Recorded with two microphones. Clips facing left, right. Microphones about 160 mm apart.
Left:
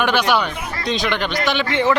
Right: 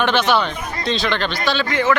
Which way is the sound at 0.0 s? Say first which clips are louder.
Right 1 dB; 10° left (ahead or behind).